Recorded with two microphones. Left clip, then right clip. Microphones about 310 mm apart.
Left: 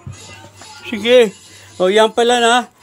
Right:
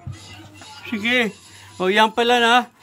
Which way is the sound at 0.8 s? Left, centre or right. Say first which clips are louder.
Left 9 dB; centre.